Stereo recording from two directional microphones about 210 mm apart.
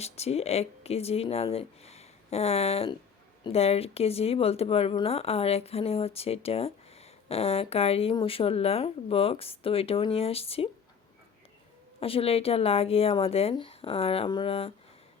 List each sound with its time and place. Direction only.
0.0 s speech: 30° left (ahead or behind)
11.9 s speech: 25° left (ahead or behind)